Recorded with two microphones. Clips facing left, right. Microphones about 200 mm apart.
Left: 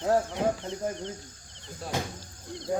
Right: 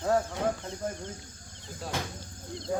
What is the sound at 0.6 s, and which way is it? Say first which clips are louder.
Speech: left 3 dB; 30° left (ahead or behind).